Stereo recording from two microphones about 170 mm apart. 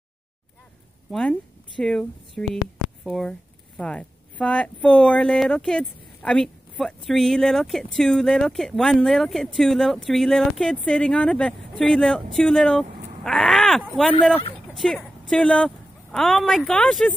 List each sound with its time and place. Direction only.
1.8 s speech: 5° left (ahead or behind)